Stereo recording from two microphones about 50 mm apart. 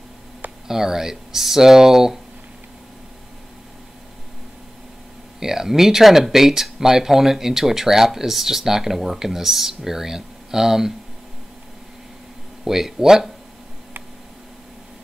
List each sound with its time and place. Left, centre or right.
0.7 s speech: centre
5.4 s speech: centre
12.6 s speech: centre